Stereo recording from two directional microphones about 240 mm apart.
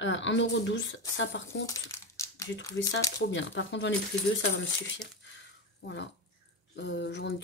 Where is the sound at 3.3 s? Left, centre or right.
Left.